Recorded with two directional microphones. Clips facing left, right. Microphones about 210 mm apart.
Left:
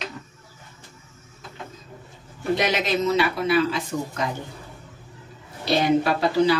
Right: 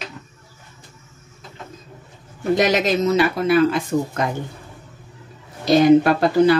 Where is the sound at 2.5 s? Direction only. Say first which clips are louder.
Right 6 dB; 45° right (ahead or behind).